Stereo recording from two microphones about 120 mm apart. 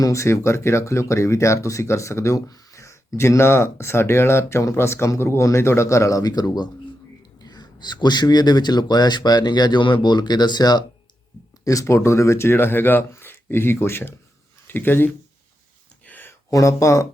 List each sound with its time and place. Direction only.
0.0 s speech: 25° left (ahead or behind)
16.0 s a sound: 15° left (ahead or behind)
16.5 s speech: 25° left (ahead or behind)